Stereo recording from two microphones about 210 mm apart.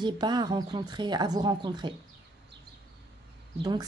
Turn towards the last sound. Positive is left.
turn(degrees=-20)  # may be behind; listen again after turning